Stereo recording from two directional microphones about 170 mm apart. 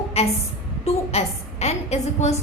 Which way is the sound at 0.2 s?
40° left (ahead or behind).